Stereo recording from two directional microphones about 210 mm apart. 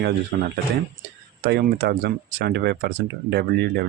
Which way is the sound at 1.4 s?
50° right (ahead or behind).